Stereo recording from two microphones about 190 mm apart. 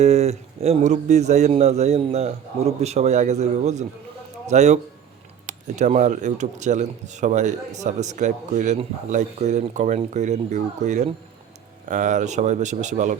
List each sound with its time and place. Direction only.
0.0 s speech: 35° right (ahead or behind)